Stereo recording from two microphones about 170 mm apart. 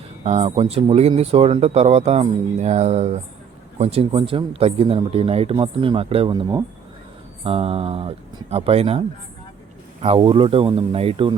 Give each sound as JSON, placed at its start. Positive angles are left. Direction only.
{"t": 0.3, "sound": "speech", "side_deg": -35}